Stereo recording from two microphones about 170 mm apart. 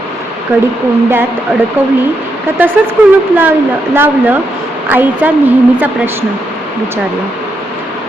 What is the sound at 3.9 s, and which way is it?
A woman's voice, 10° right (ahead or behind).